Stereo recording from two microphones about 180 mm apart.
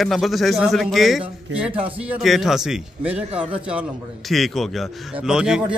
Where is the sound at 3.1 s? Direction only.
30° right (ahead or behind).